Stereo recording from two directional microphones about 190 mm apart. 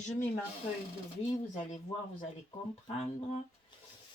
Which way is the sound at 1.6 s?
40° left (ahead or behind).